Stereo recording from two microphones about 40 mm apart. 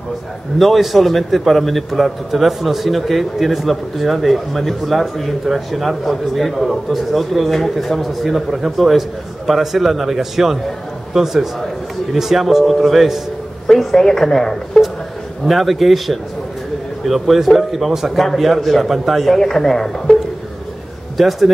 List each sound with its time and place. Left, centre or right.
0.6 s a man's voice: centre
13.9 s speech: centre
15.4 s a man's voice: centre
19.3 s speech: centre
21.2 s a man's voice: centre